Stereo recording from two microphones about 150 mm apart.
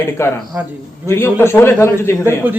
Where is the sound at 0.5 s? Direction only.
10° right (ahead or behind).